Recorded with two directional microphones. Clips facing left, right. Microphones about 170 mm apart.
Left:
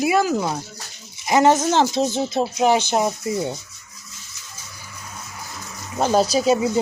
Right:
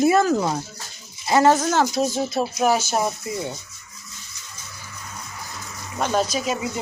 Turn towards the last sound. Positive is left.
turn(degrees=30)  # may be behind; listen again after turning